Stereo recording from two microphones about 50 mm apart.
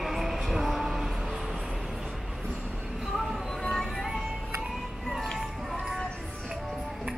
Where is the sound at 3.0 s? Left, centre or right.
Centre.